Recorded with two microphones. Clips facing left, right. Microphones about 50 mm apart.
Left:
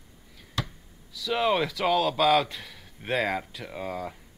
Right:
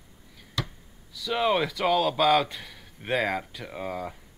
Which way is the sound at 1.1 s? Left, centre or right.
Centre.